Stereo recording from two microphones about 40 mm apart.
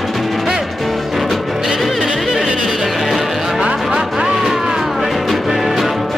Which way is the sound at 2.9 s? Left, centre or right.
Centre.